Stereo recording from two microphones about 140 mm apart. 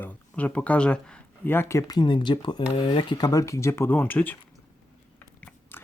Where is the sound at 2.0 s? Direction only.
35° left (ahead or behind); by 4.4 s 15° left (ahead or behind).